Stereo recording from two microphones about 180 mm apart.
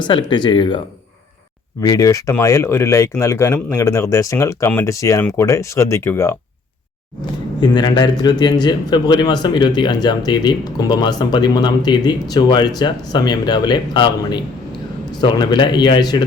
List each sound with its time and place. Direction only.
0.0 s a man's voice: 25° left (ahead or behind)
1.8 s speech: 20° left (ahead or behind)
7.6 s a man's voice: 25° left (ahead or behind)